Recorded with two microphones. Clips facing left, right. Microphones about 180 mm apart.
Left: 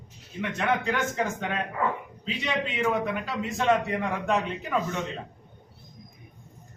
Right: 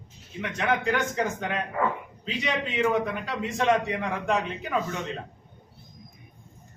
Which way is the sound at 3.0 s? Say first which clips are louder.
Left 1 dB; centre (ahead or behind).